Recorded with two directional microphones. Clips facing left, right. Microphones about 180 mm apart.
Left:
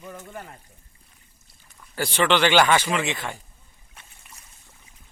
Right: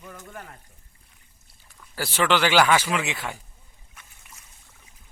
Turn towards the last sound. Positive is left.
turn(degrees=-5)  # may be behind; listen again after turning